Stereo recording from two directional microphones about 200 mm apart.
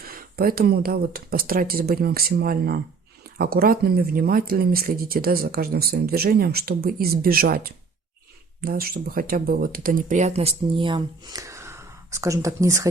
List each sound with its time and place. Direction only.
0.0 s speech: 45° right (ahead or behind); by 12.9 s 15° right (ahead or behind)